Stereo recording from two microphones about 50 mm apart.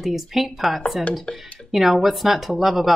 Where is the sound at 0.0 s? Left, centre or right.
Centre.